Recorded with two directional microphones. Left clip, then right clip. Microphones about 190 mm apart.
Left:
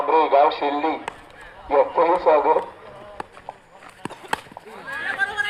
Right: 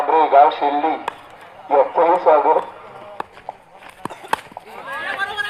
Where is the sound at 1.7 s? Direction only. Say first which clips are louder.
Right 3 dB; 5° left (ahead or behind).